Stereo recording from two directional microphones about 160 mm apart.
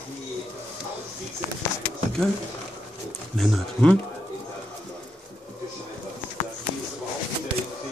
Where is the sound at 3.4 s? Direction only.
5° left (ahead or behind).